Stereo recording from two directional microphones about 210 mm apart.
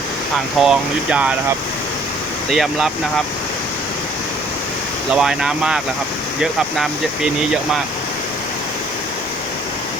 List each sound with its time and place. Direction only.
0.6 s speech: 5° right (ahead or behind)
2.5 s speech: centre (ahead or behind)
5.1 s speech: 5° right (ahead or behind)